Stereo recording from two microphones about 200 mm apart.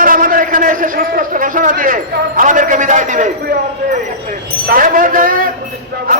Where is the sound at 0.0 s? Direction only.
45° right (ahead or behind).